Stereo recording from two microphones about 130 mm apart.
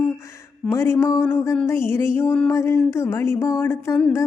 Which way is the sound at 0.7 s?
20° left (ahead or behind).